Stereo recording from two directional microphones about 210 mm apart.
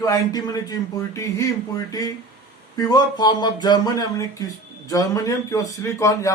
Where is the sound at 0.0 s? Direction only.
20° left (ahead or behind).